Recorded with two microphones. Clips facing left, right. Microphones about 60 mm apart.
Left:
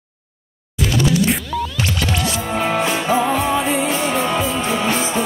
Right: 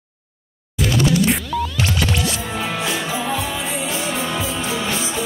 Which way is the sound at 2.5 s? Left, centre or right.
Left.